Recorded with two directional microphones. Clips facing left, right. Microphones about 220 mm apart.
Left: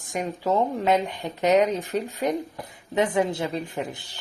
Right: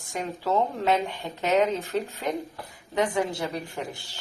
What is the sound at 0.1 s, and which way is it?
A woman's voice, 15° left (ahead or behind).